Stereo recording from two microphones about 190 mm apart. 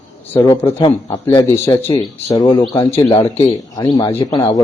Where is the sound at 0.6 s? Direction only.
25° left (ahead or behind).